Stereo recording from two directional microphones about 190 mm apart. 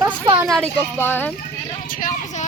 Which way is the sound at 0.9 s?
10° left (ahead or behind).